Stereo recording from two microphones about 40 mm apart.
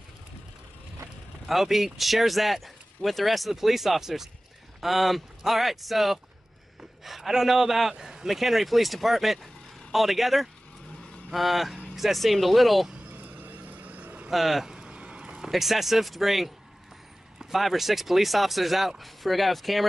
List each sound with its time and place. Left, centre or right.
1.5 s a man's voice: centre
13.2 s vehicle: right
14.3 s speech: centre
14.7 s a sound: right
15.5 s speech: centre